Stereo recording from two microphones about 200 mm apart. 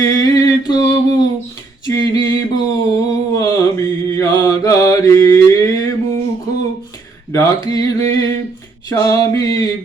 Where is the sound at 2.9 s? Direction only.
15° left (ahead or behind).